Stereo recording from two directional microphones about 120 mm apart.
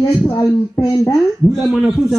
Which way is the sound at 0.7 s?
30° left (ahead or behind).